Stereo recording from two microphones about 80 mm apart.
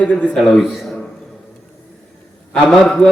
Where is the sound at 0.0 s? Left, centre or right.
Centre.